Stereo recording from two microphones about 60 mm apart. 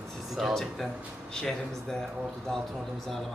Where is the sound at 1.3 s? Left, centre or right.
Centre.